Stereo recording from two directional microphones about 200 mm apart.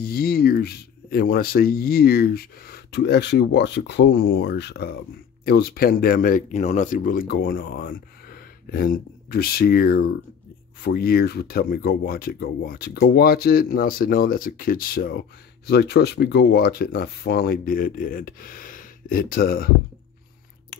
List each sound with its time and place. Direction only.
0.0 s speech: 50° left (ahead or behind)